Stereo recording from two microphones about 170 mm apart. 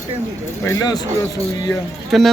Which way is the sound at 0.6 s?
20° left (ahead or behind).